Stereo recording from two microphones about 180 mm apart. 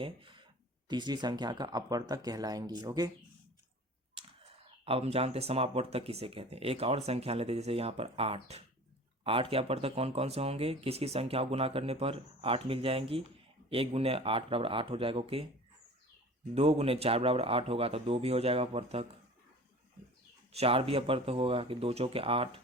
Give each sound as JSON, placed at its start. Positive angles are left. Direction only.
{"t": 0.0, "sound": "a sound", "side_deg": -30}
{"t": 0.9, "sound": "speech", "side_deg": -25}
{"t": 4.9, "sound": "speech", "side_deg": -35}
{"t": 16.6, "sound": "speech", "side_deg": -35}
{"t": 20.5, "sound": "speech", "side_deg": -35}